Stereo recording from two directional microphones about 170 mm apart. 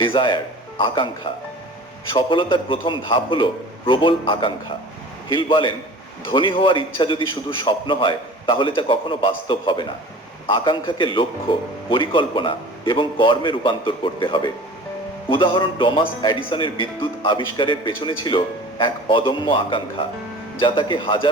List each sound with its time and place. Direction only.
0.0 s a man's voice: 30° left (ahead or behind)
2.1 s a man's voice: 30° left (ahead or behind)